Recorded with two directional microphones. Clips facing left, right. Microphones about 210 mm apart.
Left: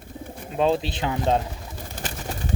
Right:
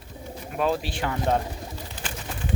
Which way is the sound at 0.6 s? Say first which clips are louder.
Left 3 dB; 25° left (ahead or behind).